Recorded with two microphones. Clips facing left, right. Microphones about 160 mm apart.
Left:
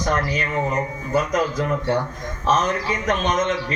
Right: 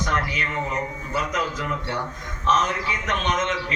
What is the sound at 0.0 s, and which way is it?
A man's voice, 40° left (ahead or behind).